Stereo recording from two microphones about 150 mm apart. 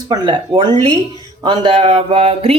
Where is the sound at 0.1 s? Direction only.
30° right (ahead or behind).